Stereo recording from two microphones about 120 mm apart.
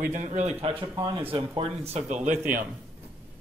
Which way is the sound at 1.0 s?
45° right (ahead or behind).